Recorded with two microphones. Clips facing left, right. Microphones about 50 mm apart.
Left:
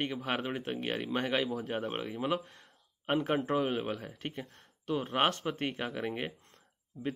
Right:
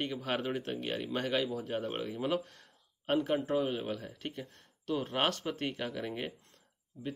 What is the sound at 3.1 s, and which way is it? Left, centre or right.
Speech, left.